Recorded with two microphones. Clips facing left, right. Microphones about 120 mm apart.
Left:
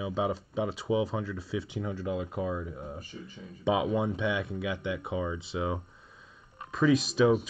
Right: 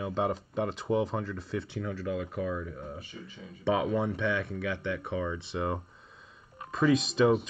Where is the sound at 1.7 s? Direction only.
20° left (ahead or behind).